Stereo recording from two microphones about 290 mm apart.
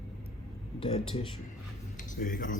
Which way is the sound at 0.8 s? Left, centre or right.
Centre.